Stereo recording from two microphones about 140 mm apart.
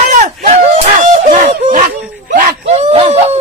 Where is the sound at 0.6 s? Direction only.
55° right (ahead or behind).